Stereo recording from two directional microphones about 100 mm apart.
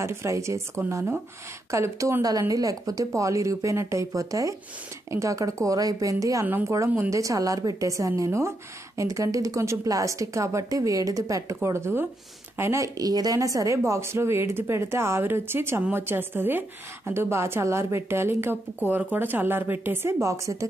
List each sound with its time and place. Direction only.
0.0 s a woman's voice: 25° right (ahead or behind)